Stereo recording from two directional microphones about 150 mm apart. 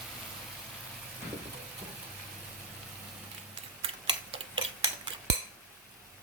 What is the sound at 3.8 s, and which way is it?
Tick-tock, 40° right (ahead or behind).